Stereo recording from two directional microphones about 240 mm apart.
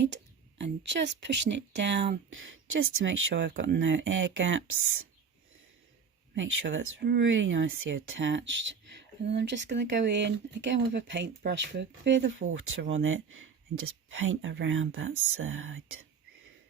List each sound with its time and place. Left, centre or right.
0.6 s speech: right
6.3 s speech: right